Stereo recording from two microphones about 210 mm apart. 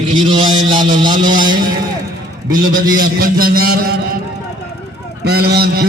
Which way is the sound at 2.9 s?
45° right (ahead or behind).